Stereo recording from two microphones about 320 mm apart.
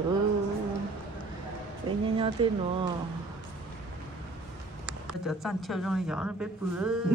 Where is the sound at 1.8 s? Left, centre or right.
Centre.